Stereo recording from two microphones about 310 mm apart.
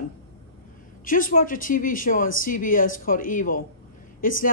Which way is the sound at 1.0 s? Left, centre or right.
Left.